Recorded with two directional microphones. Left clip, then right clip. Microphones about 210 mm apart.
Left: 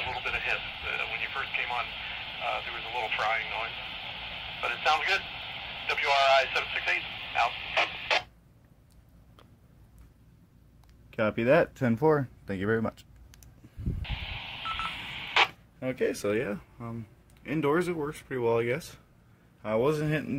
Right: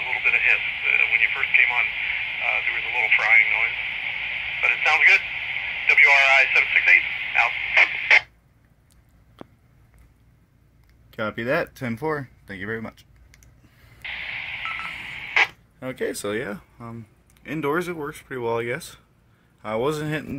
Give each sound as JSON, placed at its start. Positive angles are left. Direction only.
{"t": 0.2, "sound": "radio", "side_deg": 15}
{"t": 11.1, "sound": "speech", "side_deg": 5}
{"t": 12.0, "sound": "speech", "side_deg": 30}
{"t": 14.0, "sound": "telephone dialing", "side_deg": 15}
{"t": 19.6, "sound": "a man's voice", "side_deg": -5}